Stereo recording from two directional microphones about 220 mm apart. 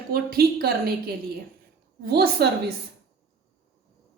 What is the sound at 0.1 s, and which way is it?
A woman's voice, 45° right (ahead or behind).